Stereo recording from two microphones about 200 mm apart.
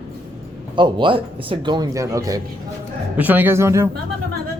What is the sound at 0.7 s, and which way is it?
Speech, 25° right (ahead or behind).